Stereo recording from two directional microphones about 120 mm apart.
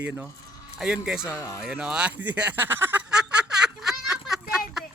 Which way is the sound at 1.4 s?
25° left (ahead or behind).